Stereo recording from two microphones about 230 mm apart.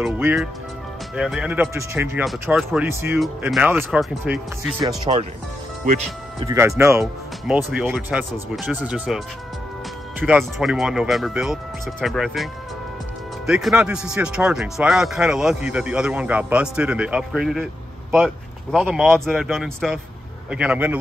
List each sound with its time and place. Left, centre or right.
0.0 s speech: centre
4.7 s speech: centre
6.4 s speech: centre
10.2 s speech: centre
13.5 s speech: centre